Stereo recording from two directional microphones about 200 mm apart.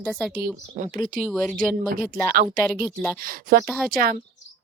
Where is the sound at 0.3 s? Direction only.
45° right (ahead or behind).